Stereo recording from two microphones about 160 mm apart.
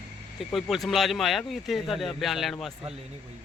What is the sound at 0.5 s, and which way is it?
A man's voice, centre (ahead or behind).